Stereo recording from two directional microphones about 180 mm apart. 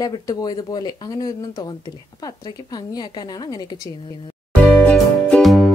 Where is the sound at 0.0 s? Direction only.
20° left (ahead or behind).